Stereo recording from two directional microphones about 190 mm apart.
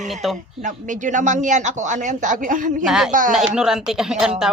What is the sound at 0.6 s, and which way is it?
Speech, 40° right (ahead or behind).